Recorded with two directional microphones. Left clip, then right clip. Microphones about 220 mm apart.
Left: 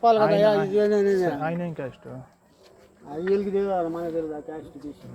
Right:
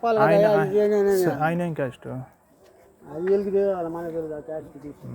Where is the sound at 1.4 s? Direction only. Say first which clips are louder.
Right 5 dB; 55° right (ahead or behind).